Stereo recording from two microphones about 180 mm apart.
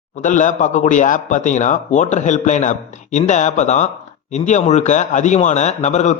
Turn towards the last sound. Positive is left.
turn(degrees=40)  # may be behind; listen again after turning